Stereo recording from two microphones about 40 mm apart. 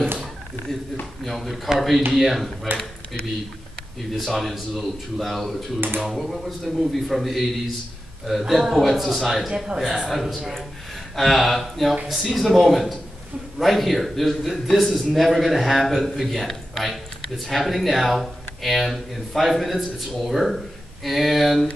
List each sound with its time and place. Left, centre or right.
1.2 s speech: centre
4.1 s speech: centre